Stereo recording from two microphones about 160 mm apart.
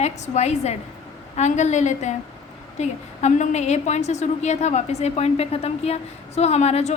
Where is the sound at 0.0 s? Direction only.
45° left (ahead or behind).